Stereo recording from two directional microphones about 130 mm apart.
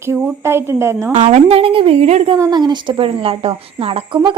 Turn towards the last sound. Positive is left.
turn(degrees=-45)  # may be behind; listen again after turning